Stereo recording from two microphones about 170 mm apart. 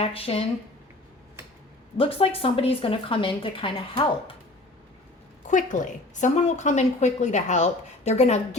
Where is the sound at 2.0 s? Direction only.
35° left (ahead or behind).